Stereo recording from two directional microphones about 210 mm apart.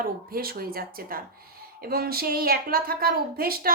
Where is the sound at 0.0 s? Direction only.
45° right (ahead or behind).